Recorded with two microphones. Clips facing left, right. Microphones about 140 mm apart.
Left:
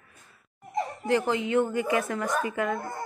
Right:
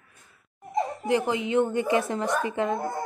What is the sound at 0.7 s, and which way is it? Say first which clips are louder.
Speech: right 1 dB; 20° right (ahead or behind).